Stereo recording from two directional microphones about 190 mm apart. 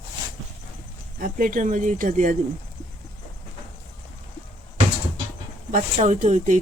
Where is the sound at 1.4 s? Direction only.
45° right (ahead or behind).